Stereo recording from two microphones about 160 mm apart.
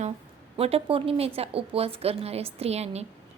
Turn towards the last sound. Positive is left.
turn(degrees=-40)  # may be behind; listen again after turning